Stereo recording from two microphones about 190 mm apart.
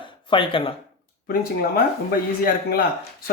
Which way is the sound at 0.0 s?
25° left (ahead or behind).